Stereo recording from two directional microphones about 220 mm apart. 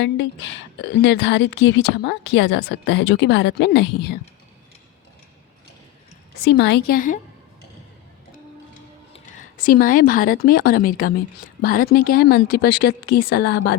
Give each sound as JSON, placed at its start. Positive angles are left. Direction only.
{"t": 0.0, "sound": "a woman's voice", "side_deg": 55}
{"t": 6.4, "sound": "a woman's voice", "side_deg": 50}
{"t": 9.1, "sound": "a woman's voice", "side_deg": 40}